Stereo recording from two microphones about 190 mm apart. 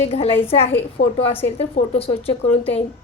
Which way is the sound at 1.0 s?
60° left (ahead or behind).